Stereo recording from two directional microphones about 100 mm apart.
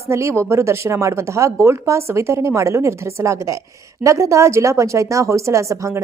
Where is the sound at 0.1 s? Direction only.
25° right (ahead or behind).